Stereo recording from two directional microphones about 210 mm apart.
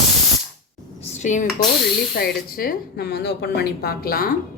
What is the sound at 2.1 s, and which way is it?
Speech, 45° left (ahead or behind).